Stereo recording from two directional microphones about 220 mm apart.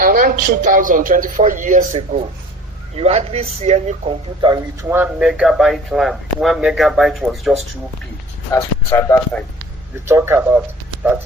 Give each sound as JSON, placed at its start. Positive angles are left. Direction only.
{"t": 0.0, "sound": "a man's voice", "side_deg": -40}
{"t": 4.4, "sound": "speech", "side_deg": -15}
{"t": 8.5, "sound": "speech", "side_deg": 15}
{"t": 10.1, "sound": "speech", "side_deg": -10}